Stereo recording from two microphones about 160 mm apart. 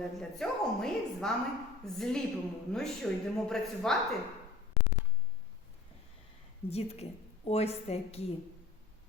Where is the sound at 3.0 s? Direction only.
5° left (ahead or behind).